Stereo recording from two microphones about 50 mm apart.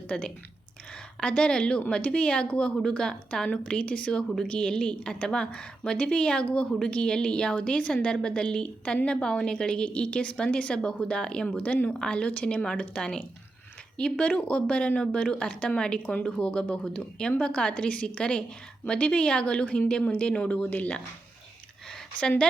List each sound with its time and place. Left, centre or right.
0.1 s a woman's voice: centre
20.6 s speech: left